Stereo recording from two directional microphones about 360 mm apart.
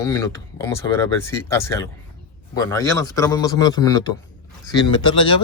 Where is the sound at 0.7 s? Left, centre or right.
Centre.